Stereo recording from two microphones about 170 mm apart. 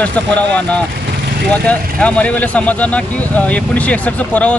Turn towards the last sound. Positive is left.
turn(degrees=10)  # may be behind; listen again after turning